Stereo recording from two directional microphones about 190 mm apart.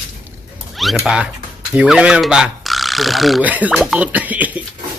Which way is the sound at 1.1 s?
5° right (ahead or behind).